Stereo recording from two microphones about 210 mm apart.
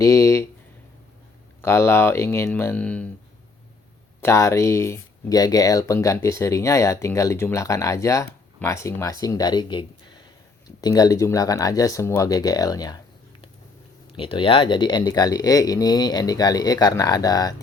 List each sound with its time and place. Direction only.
0.0 s speech: 15° left (ahead or behind)
1.6 s speech: 10° left (ahead or behind)
4.2 s speech: 15° left (ahead or behind)
14.2 s speech: 25° left (ahead or behind)